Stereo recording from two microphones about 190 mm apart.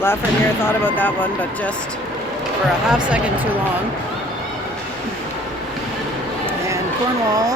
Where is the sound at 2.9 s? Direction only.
5° right (ahead or behind).